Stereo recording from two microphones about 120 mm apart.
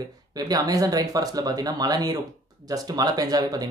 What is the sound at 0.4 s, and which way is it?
Speech, 30° right (ahead or behind).